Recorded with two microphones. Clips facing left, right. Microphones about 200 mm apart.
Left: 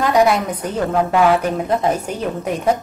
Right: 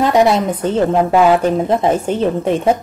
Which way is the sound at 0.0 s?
25° right (ahead or behind).